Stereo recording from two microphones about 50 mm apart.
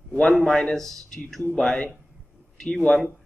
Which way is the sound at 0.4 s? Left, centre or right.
Centre.